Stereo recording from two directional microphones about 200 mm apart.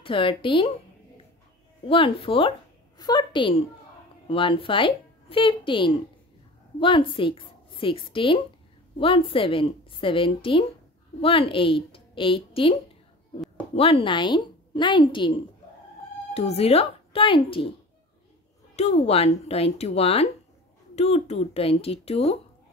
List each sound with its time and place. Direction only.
0.0 s a woman's voice: 25° left (ahead or behind)
1.9 s a woman's voice: 25° left (ahead or behind)
13.7 s a woman's voice: 30° left (ahead or behind)
18.8 s speech: 35° left (ahead or behind)